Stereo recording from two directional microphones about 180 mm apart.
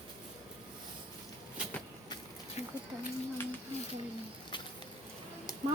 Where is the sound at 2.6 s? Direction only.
35° left (ahead or behind).